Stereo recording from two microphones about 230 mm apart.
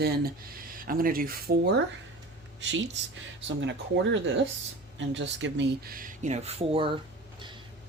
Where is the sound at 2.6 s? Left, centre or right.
Right.